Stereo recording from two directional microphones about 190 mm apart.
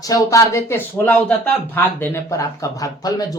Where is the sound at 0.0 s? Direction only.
15° left (ahead or behind).